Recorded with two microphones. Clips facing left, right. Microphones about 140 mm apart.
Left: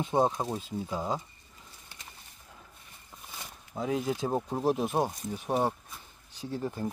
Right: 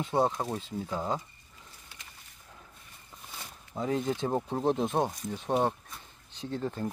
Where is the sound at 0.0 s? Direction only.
15° left (ahead or behind).